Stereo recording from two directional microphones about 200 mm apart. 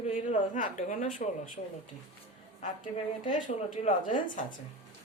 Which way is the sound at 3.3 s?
35° left (ahead or behind).